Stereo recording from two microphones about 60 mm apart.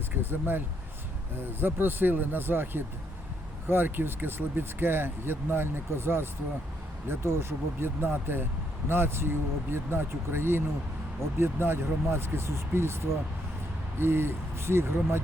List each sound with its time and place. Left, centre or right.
0.2 s speech: right